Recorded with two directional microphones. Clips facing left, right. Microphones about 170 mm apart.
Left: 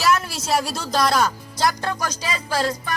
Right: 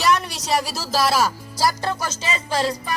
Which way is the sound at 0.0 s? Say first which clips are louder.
Even; centre (ahead or behind).